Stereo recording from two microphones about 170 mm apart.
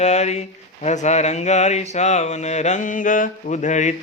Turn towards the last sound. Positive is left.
turn(degrees=45)  # may be behind; listen again after turning